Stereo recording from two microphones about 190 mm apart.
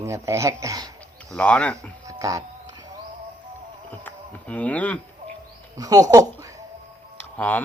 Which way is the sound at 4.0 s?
10° left (ahead or behind).